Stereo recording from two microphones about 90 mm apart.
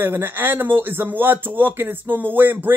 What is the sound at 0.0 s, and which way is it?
Speech, 25° right (ahead or behind).